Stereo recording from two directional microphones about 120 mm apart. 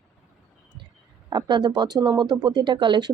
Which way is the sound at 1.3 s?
40° right (ahead or behind).